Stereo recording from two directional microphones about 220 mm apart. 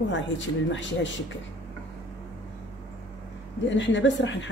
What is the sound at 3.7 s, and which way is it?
Speech, 55° left (ahead or behind).